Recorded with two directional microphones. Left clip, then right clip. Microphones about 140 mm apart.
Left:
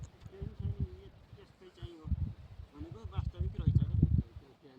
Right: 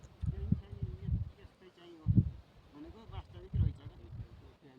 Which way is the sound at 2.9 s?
35° left (ahead or behind).